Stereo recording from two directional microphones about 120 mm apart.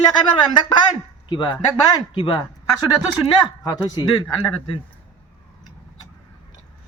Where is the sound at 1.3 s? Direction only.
40° left (ahead or behind).